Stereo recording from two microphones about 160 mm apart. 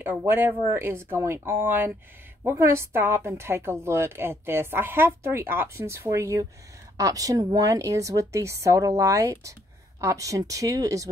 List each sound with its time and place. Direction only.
0.0 s a woman's voice: 15° right (ahead or behind)